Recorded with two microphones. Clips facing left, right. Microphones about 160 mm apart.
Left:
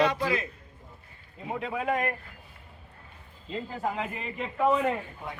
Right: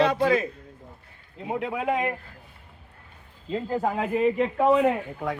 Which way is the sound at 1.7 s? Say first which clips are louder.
Right 1 dB; 15° right (ahead or behind).